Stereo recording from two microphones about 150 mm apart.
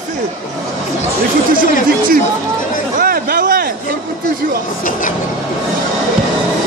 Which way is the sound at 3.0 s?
75° right (ahead or behind).